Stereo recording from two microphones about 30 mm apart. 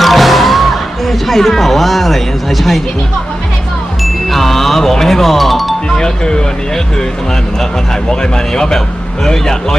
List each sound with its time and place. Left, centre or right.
0.0 s music: centre
4.0 s music: centre
6.0 s speech: left
8.2 s speech: left